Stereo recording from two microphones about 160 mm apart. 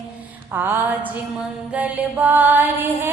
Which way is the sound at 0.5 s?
15° right (ahead or behind).